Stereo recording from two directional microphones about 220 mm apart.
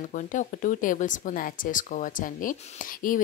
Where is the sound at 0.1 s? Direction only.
35° left (ahead or behind).